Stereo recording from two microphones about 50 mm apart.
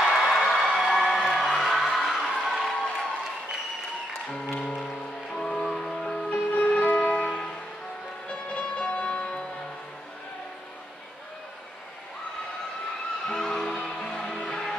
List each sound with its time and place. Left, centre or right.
0.0 s a sound: centre
1.4 s music: centre
4.3 s music: centre
6.3 s music: left
7.1 s music: centre
13.3 s music: centre